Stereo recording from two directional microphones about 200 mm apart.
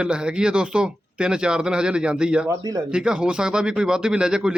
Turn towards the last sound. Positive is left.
turn(degrees=-5)  # may be behind; listen again after turning